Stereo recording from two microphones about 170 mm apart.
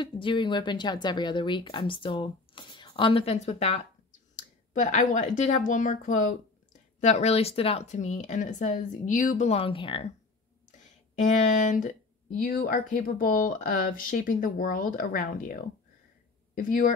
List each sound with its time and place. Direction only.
0.0 s speech: 30° left (ahead or behind)
11.1 s speech: 45° left (ahead or behind)